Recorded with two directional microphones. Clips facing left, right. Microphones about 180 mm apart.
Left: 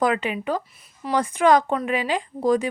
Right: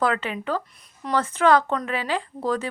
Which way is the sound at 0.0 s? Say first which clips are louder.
Left 2 dB; 15° left (ahead or behind).